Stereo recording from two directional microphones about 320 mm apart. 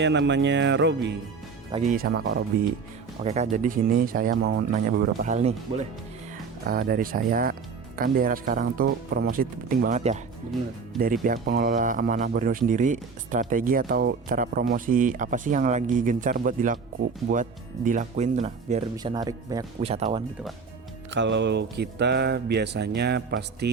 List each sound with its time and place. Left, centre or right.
0.0 s speech: right; by 20.2 s centre
21.1 s speech: right